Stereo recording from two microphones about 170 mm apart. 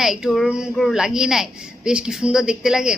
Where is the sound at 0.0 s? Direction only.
Centre (ahead or behind).